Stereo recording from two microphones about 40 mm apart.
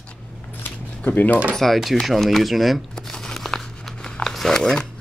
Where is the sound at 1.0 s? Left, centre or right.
Left.